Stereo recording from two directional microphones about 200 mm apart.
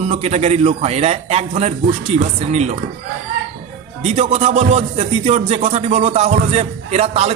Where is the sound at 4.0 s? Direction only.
30° right (ahead or behind).